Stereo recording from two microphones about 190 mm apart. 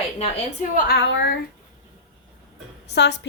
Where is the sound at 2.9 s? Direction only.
65° left (ahead or behind).